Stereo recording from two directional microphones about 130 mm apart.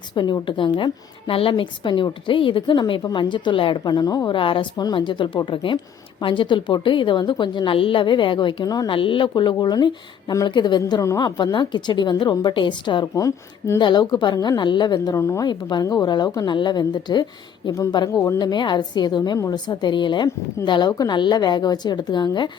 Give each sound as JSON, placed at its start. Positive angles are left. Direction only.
{"t": 0.1, "sound": "speech", "side_deg": 35}
{"t": 4.4, "sound": "speech", "side_deg": 40}
{"t": 8.9, "sound": "speech", "side_deg": 40}
{"t": 13.1, "sound": "speech", "side_deg": 25}